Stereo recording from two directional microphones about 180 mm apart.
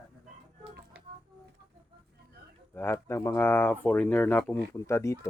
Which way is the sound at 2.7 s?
10° left (ahead or behind).